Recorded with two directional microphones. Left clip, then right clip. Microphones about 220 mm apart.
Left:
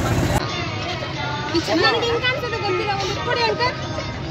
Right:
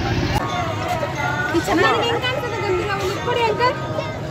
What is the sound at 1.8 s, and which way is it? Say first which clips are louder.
Speech: even; 35° left (ahead or behind).